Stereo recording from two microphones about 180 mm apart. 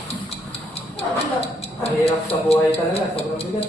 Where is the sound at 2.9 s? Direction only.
35° left (ahead or behind).